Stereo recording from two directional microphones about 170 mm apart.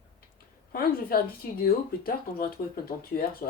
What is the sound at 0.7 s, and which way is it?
Speech, 60° left (ahead or behind).